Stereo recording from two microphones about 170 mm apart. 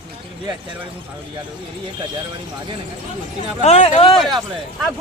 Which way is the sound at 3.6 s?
40° left (ahead or behind).